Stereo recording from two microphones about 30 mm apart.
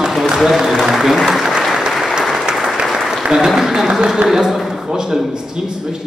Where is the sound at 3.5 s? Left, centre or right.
Centre.